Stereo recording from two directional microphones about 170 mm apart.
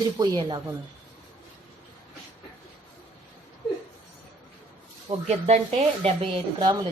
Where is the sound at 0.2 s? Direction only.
25° right (ahead or behind).